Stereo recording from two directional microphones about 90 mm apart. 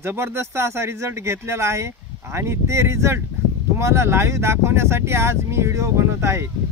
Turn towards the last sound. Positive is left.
turn(degrees=-30)  # may be behind; listen again after turning